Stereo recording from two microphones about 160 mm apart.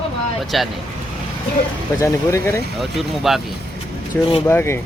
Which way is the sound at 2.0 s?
15° left (ahead or behind).